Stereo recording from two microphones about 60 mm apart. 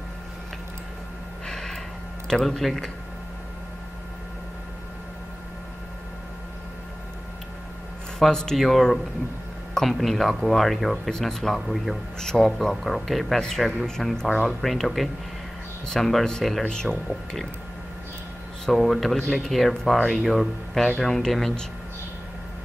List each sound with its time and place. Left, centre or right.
1.5 s gasp: centre
2.2 s speech: centre
8.2 s speech: centre
14.6 s speech: centre
18.7 s speech: centre